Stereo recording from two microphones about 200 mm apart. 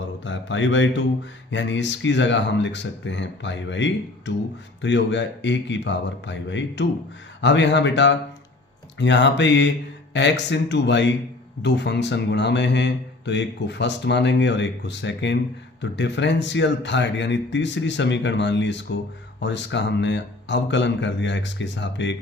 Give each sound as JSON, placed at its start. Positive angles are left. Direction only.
{"t": 0.3, "sound": "speech", "side_deg": 65}